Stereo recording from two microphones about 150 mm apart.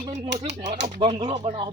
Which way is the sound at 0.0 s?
50° right (ahead or behind).